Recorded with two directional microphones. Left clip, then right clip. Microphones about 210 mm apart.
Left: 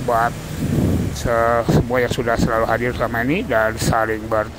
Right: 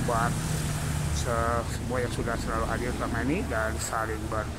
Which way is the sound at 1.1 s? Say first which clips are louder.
Left 11 dB; 25° left (ahead or behind).